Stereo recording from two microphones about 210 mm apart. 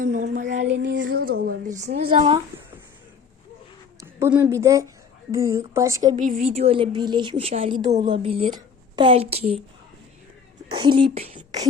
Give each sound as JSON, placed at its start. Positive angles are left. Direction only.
{"t": 0.0, "sound": "speech", "side_deg": -35}
{"t": 0.7, "sound": "a sound", "side_deg": -55}
{"t": 1.2, "sound": "a woman's voice", "side_deg": -45}
{"t": 2.5, "sound": "a sound", "side_deg": -10}
{"t": 4.0, "sound": "a woman's voice", "side_deg": -10}
{"t": 6.1, "sound": "a woman's voice", "side_deg": -35}
{"t": 10.8, "sound": "a woman's voice", "side_deg": -25}